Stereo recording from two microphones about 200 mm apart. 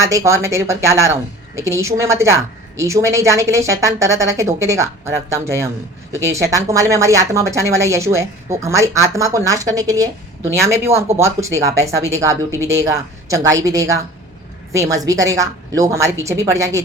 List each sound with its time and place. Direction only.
0.0 s speech: 15° right (ahead or behind)